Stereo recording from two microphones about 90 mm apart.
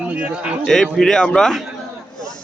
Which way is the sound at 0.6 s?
5° left (ahead or behind).